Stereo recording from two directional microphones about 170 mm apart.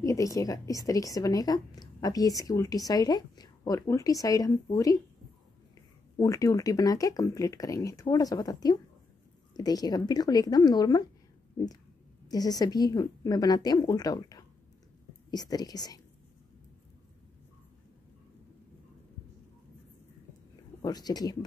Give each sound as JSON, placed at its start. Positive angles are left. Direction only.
{"t": 0.0, "sound": "a woman's voice", "side_deg": 20}
{"t": 6.1, "sound": "a woman's voice", "side_deg": 20}
{"t": 11.5, "sound": "a sound", "side_deg": 20}
{"t": 12.3, "sound": "a woman's voice", "side_deg": 20}
{"t": 20.8, "sound": "a woman's voice", "side_deg": 25}